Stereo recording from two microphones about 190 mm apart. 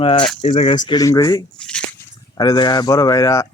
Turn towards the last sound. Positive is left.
turn(degrees=15)  # may be behind; listen again after turning